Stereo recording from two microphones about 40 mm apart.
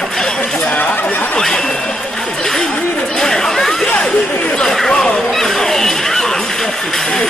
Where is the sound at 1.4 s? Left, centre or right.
Centre.